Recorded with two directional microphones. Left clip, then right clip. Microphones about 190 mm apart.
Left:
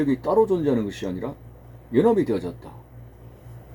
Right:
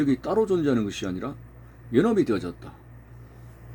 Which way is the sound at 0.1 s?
20° right (ahead or behind).